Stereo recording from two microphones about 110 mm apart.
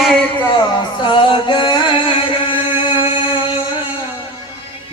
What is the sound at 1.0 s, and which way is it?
Music, 50° left (ahead or behind).